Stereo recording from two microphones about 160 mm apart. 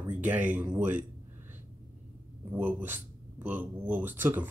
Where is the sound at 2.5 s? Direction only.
10° right (ahead or behind).